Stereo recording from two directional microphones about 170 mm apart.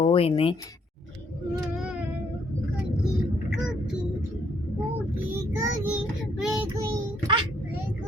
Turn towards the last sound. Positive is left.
turn(degrees=-20)  # may be behind; listen again after turning